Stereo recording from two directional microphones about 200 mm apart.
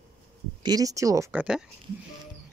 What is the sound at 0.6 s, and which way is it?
Speech, 20° right (ahead or behind).